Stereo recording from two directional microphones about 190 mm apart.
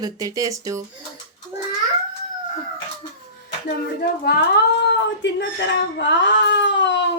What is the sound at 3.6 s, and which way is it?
Speech, 55° left (ahead or behind).